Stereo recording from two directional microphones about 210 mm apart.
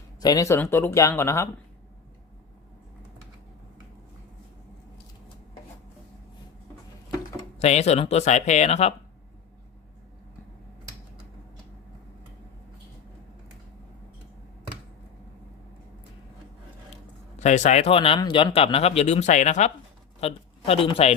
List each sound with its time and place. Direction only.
0.2 s speech: 15° left (ahead or behind)
7.6 s speech: 30° left (ahead or behind)
17.3 s speech: 35° left (ahead or behind)